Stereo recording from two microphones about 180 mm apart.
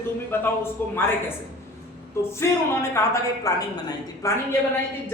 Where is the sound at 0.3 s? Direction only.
15° left (ahead or behind).